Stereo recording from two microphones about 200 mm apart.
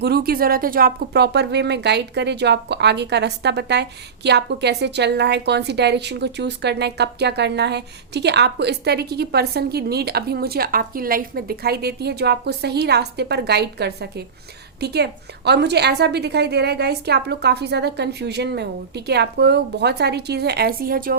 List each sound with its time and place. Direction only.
0.0 s speech: 50° right (ahead or behind)